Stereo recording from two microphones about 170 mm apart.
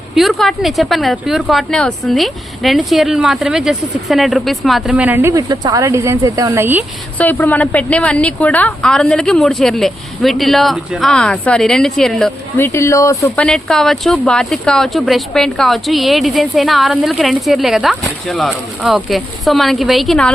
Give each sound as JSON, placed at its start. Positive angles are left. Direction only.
{"t": 0.2, "sound": "speech", "side_deg": 0}
{"t": 5.3, "sound": "speech", "side_deg": -25}
{"t": 7.2, "sound": "speech", "side_deg": 10}
{"t": 12.5, "sound": "speech", "side_deg": 15}
{"t": 13.3, "sound": "speech", "side_deg": 5}